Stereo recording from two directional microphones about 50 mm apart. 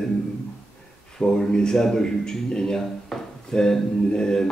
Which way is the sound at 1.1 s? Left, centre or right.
Centre.